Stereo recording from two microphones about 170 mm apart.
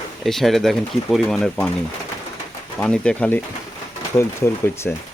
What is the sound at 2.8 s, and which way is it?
Speech, 5° left (ahead or behind).